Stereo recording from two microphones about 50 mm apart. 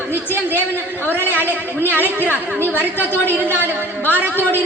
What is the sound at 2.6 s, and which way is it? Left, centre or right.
A woman's voice, right.